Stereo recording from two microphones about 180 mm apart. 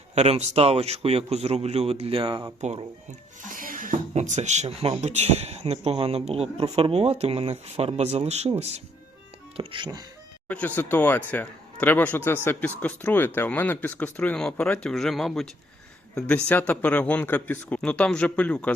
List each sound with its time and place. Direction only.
0.1 s speech: 35° right (ahead or behind)
2.6 s speech: 40° right (ahead or behind)
10.8 s speech: 10° left (ahead or behind)
16.5 s speech: 10° left (ahead or behind)